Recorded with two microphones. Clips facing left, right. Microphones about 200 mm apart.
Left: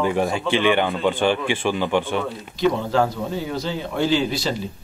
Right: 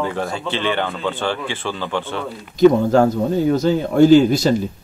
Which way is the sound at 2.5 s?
45° right (ahead or behind).